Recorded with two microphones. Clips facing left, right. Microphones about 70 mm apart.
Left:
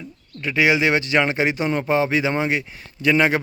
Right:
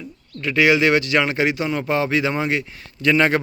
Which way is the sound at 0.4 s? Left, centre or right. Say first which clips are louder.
Right 2 dB; centre.